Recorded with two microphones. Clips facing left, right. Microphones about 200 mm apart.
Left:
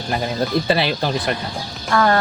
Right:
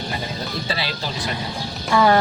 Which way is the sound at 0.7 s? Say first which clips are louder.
Left 8 dB; 55° left (ahead or behind).